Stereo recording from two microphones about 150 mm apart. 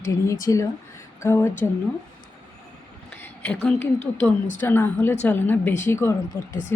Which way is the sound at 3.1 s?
10° left (ahead or behind).